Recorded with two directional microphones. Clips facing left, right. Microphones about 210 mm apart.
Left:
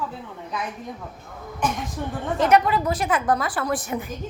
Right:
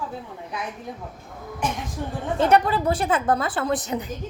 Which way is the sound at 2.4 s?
30° right (ahead or behind).